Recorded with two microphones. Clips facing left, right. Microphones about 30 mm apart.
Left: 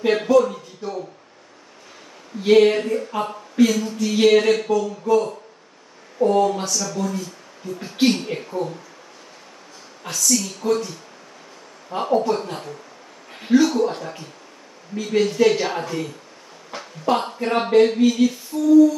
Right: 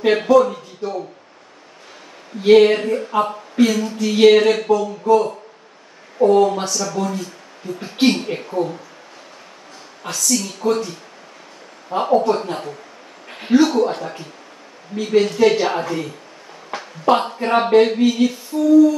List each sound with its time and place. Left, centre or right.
0.0 s speech: right
2.4 s speech: right
10.3 s speech: right
11.9 s speech: right
13.4 s speech: right